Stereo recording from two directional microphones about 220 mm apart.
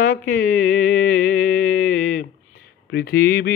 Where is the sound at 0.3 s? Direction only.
40° left (ahead or behind).